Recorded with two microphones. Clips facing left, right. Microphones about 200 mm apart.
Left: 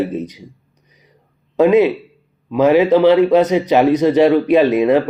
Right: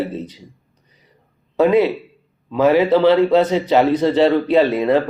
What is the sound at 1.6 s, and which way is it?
A man's voice, 15° left (ahead or behind).